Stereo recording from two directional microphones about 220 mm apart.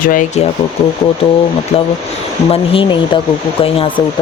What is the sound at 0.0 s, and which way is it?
Speech, 40° left (ahead or behind).